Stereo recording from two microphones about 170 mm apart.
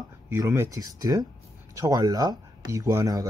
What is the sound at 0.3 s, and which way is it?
Speech, 15° right (ahead or behind).